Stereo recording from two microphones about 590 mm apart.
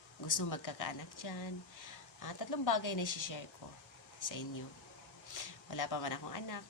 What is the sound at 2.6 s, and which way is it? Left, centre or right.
Speech, left.